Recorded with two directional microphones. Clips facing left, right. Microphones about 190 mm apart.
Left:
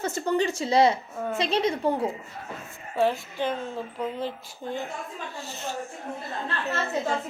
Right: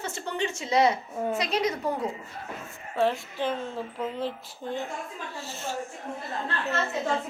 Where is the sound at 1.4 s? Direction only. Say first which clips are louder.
Left 6 dB; 30° left (ahead or behind).